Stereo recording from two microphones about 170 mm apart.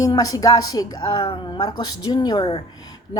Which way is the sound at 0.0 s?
20° left (ahead or behind).